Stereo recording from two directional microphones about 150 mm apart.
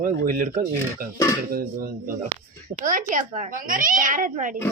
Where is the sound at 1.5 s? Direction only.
80° right.